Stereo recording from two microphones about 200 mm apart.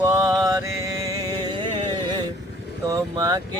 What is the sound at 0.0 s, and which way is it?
Mantra, 15° right (ahead or behind).